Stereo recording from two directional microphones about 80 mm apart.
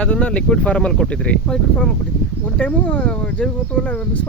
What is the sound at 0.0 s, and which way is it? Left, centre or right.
Speech, centre.